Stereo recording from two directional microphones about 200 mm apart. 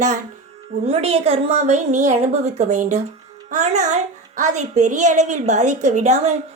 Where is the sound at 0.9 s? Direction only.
30° right (ahead or behind).